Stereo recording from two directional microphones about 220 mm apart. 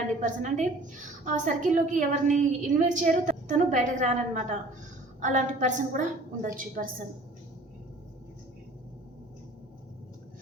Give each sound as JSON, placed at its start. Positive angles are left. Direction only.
{"t": 0.2, "sound": "a woman's voice", "side_deg": -35}